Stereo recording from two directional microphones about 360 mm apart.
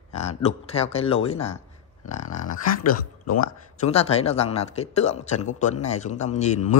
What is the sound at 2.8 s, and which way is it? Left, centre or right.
Speech, left.